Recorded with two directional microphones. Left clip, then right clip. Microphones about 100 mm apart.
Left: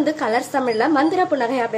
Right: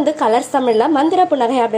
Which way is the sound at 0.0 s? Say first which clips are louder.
Right 5 dB; 20° right (ahead or behind).